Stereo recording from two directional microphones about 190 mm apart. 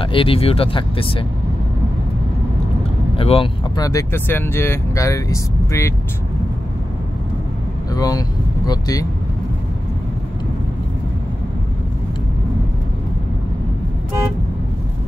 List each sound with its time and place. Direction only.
0.0 s speech: 30° left (ahead or behind)
3.2 s speech: 30° left (ahead or behind)
3.8 s speech: 15° left (ahead or behind)
7.9 s speech: 20° left (ahead or behind)